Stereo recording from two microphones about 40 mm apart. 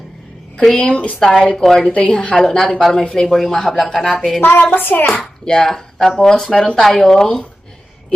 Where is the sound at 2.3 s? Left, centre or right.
Centre.